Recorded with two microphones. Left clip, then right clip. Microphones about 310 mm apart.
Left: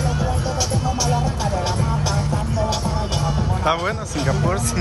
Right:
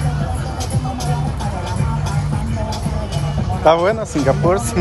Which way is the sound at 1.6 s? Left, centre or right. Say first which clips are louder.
Left 2 dB; left.